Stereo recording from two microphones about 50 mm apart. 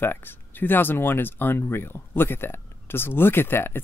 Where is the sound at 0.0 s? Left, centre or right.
Left.